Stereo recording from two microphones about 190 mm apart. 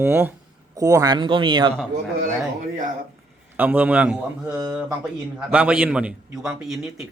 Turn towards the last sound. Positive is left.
turn(degrees=0)  # may be behind; listen again after turning